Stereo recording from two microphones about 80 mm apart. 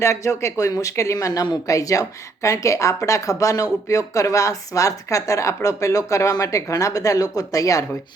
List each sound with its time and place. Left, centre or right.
0.0 s a woman's voice: left